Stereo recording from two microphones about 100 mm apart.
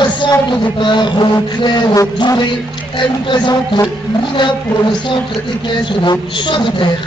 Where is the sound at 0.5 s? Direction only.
55° left (ahead or behind).